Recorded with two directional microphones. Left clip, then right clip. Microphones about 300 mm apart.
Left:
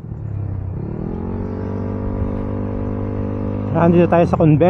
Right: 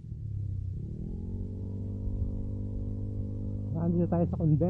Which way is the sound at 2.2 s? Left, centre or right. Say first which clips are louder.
Left 18 dB; centre.